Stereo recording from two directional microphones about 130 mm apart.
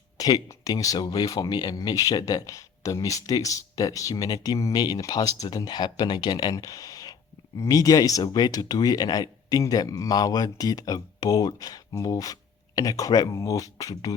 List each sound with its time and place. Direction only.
0.2 s speech: 30° left (ahead or behind)